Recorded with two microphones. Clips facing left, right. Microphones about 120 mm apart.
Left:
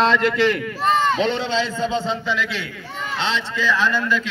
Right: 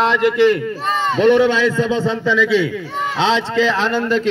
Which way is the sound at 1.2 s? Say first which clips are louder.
Right 9 dB; 65° right (ahead or behind).